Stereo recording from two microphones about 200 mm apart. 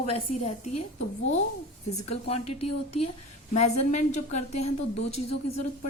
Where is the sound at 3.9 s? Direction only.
35° left (ahead or behind).